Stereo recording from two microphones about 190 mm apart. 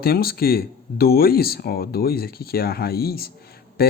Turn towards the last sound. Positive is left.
turn(degrees=55)  # may be behind; listen again after turning